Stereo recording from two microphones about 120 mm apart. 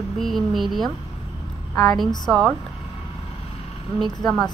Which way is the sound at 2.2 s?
Centre (ahead or behind).